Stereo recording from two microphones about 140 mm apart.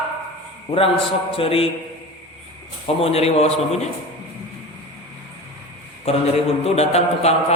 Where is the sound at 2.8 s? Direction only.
45° left (ahead or behind).